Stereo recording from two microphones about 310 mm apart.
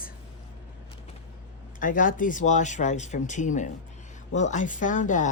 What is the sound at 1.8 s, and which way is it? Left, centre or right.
Speech, left.